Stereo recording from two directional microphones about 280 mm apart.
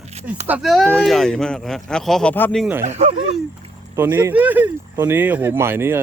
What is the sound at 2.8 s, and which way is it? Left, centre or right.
Speech, right.